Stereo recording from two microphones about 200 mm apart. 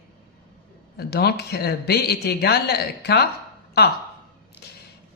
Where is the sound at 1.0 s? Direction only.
55° left (ahead or behind).